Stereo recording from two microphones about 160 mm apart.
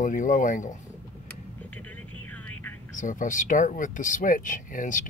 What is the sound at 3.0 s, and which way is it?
Speech, 55° left (ahead or behind).